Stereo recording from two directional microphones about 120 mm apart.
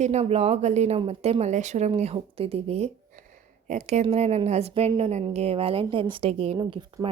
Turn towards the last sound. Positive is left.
turn(degrees=-35)  # may be behind; listen again after turning